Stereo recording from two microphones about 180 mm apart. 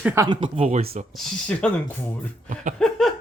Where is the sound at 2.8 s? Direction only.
Centre (ahead or behind).